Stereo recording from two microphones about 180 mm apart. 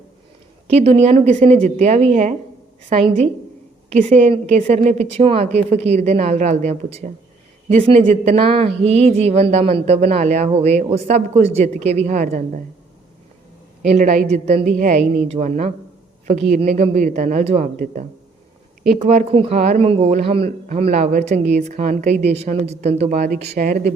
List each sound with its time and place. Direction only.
0.8 s speech: 35° right (ahead or behind)
3.9 s speech: 40° right (ahead or behind)
13.8 s a woman's voice: 45° right (ahead or behind)
19.5 s a woman's voice: 45° right (ahead or behind)
23.2 s speech: 60° right (ahead or behind)